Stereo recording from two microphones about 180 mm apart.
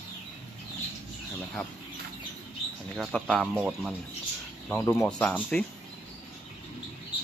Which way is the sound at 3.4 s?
5° right (ahead or behind).